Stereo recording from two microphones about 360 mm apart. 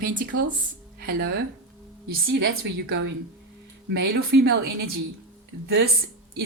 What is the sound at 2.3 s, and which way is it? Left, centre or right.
A woman's voice, right.